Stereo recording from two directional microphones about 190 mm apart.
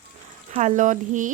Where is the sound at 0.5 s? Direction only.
40° right (ahead or behind).